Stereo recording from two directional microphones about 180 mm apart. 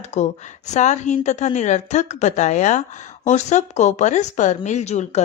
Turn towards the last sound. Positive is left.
turn(degrees=40)  # may be behind; listen again after turning